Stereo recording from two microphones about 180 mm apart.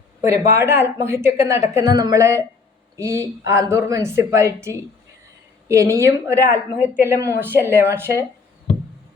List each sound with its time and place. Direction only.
0.2 s speech: 15° right (ahead or behind)